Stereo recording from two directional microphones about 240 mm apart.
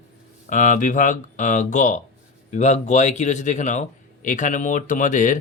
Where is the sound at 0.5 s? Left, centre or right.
Left.